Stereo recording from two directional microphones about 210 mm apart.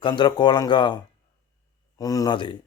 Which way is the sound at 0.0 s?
20° left (ahead or behind).